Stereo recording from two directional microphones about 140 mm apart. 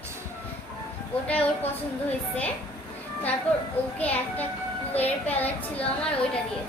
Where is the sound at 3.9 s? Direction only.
10° left (ahead or behind).